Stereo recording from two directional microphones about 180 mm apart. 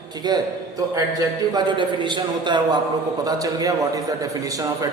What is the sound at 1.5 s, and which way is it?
A man's voice, 25° right (ahead or behind).